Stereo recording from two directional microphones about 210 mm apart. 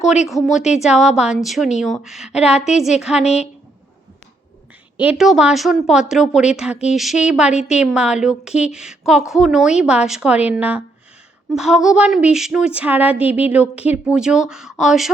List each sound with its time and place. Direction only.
0.3 s a woman's voice: centre (ahead or behind)
3.2 s a woman's voice: 30° left (ahead or behind)
4.9 s a woman's voice: 5° right (ahead or behind)